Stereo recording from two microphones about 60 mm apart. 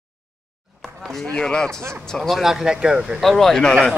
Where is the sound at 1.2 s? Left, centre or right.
Centre.